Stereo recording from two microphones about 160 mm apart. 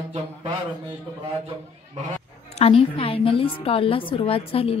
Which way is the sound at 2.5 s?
40° left (ahead or behind).